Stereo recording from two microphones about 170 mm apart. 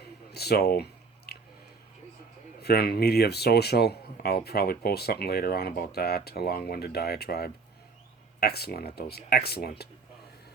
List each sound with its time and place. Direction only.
0.3 s speech: 70° left (ahead or behind)
1.3 s a sound: 70° left (ahead or behind)
2.6 s speech: 70° left (ahead or behind)